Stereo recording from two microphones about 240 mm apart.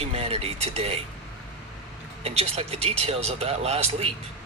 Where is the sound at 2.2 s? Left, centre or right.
Right.